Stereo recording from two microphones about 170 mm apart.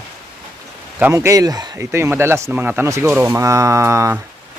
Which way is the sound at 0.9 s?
15° right (ahead or behind).